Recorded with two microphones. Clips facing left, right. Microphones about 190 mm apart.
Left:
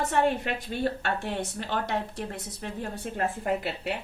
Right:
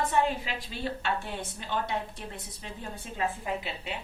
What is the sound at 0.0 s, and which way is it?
A woman's voice, 65° left (ahead or behind).